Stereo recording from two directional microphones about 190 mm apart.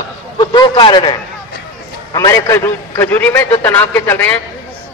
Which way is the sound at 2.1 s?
15° left (ahead or behind).